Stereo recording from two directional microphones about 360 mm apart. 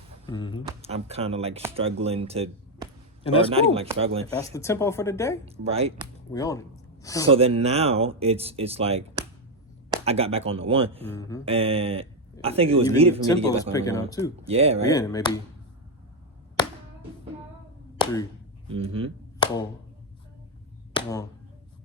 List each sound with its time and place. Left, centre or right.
0.3 s speech: centre
0.8 s speech: centre
4.5 s speech: centre
5.5 s speech: centre
6.3 s speech: centre
7.3 s speech: centre
13.2 s speech: centre
14.4 s speech: centre
14.8 s speech: centre
17.9 s a sound: centre
18.7 s speech: centre
20.9 s a sound: centre